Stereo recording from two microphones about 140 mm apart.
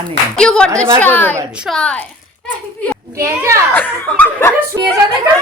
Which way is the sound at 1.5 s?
5° right (ahead or behind).